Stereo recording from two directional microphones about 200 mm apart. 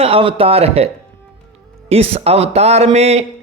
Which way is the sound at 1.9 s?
30° right (ahead or behind).